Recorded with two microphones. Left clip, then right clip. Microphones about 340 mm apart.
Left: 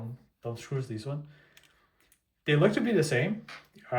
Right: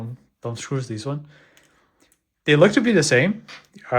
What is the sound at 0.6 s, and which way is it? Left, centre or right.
Speech, centre.